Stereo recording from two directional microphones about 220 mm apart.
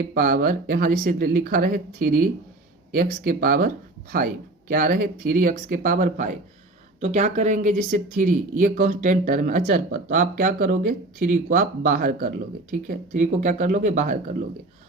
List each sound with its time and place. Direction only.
0.0 s speech: 40° right (ahead or behind)
4.7 s speech: 40° right (ahead or behind)